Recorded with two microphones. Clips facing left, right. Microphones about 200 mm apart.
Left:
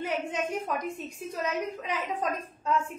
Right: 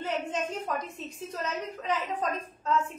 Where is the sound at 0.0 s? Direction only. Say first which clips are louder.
Left 1 dB; 10° left (ahead or behind).